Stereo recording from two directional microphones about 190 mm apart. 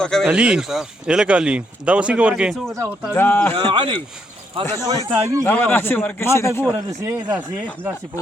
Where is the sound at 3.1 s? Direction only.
10° left (ahead or behind).